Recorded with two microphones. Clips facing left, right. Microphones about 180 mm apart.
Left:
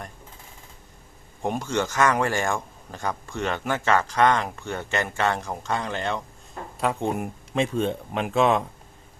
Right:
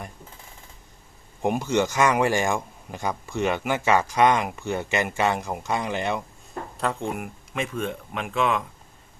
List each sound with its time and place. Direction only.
1.4 s a man's voice: 10° right (ahead or behind)
7.0 s speech: 25° left (ahead or behind)